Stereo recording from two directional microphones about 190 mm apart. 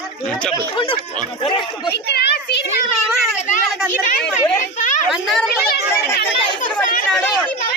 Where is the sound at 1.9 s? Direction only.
60° left (ahead or behind).